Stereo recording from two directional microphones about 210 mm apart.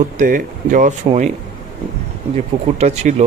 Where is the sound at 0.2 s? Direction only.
40° right (ahead or behind).